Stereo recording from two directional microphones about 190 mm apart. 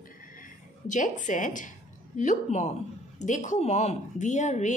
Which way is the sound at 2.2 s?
40° left (ahead or behind).